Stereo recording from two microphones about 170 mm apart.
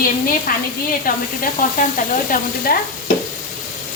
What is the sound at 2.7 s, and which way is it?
Speech, 60° left (ahead or behind).